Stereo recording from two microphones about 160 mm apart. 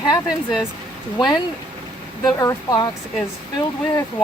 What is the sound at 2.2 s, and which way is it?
Speech, 20° left (ahead or behind).